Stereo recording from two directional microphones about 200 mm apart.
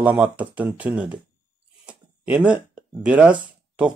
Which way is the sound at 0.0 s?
10° right (ahead or behind).